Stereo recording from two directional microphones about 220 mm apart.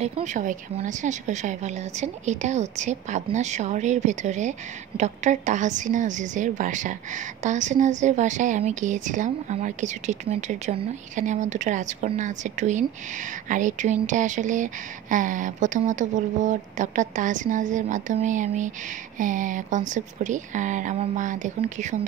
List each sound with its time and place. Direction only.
0.0 s speech: 35° right (ahead or behind)